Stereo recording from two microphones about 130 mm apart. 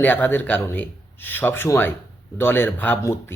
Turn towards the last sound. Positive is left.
turn(degrees=20)  # may be behind; listen again after turning